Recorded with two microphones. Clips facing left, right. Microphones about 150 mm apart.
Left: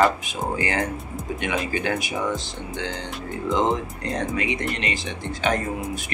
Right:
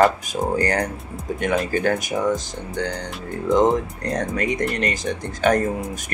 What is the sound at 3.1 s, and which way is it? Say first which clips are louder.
Speech: right 3 dB; centre (ahead or behind).